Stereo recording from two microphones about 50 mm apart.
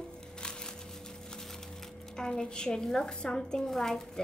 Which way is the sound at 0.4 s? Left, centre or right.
Centre.